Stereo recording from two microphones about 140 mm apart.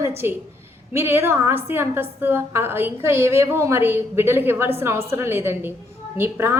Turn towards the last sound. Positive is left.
turn(degrees=-15)  # may be behind; listen again after turning